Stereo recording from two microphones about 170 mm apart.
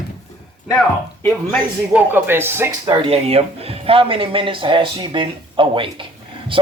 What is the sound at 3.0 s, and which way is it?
Speech, 35° right (ahead or behind).